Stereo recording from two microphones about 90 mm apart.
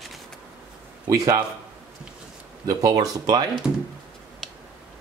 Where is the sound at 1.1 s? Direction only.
40° right (ahead or behind).